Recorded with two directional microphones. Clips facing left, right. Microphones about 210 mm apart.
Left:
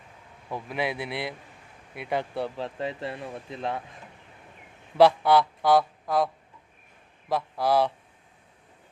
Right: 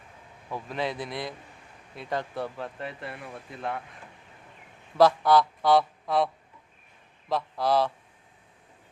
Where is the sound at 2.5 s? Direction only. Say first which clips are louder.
Left 4 dB; 30° left (ahead or behind).